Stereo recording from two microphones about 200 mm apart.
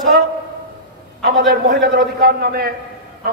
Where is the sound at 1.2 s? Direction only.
50° right (ahead or behind).